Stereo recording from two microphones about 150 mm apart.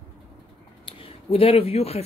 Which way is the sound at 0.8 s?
40° left (ahead or behind).